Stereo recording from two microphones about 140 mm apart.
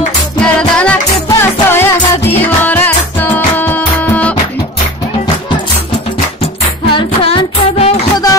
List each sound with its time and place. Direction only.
0.4 s music: 5° left (ahead or behind)
6.9 s music: 35° left (ahead or behind)